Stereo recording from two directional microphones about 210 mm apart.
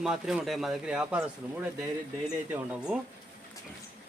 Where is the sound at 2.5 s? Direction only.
5° right (ahead or behind).